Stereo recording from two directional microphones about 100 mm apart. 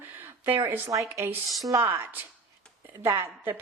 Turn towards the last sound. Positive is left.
turn(degrees=-25)  # may be behind; listen again after turning